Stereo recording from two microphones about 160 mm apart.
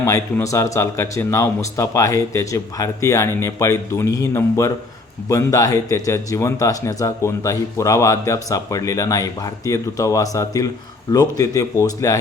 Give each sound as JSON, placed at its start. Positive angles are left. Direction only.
{"t": 0.0, "sound": "speech", "side_deg": 20}